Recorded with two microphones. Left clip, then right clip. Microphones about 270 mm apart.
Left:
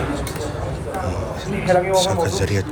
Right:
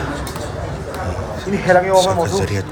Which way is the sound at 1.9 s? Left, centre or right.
Centre.